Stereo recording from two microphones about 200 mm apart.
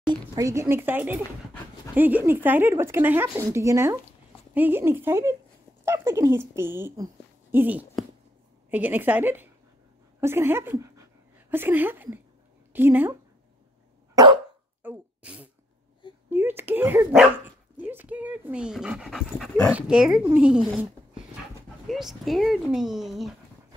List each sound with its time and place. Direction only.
0.0 s speech: 20° right (ahead or behind)
14.1 s dog: 25° right (ahead or behind)
14.8 s sneeze: 10° right (ahead or behind)
16.3 s speech: 10° right (ahead or behind)
21.8 s speech: centre (ahead or behind)